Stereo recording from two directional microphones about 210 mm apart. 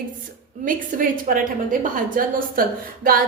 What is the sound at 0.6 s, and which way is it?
A woman's voice, 40° right (ahead or behind).